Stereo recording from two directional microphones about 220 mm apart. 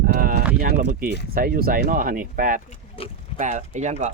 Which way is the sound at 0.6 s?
40° right (ahead or behind).